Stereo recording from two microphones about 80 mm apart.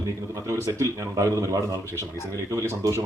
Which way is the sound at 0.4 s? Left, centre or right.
Right.